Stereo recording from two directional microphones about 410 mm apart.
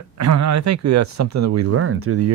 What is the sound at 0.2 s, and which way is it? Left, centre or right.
Speech, right.